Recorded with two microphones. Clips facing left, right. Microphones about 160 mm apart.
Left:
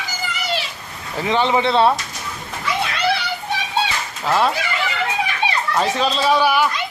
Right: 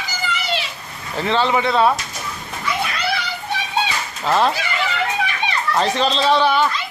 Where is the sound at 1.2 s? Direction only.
15° left (ahead or behind).